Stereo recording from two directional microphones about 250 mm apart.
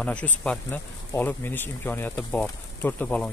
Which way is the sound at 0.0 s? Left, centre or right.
Centre.